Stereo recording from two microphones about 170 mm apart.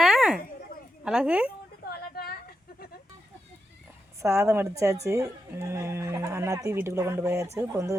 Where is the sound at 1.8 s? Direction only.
65° left (ahead or behind).